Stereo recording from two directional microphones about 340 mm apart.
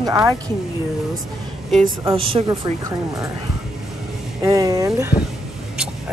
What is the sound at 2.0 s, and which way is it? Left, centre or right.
Speech, centre.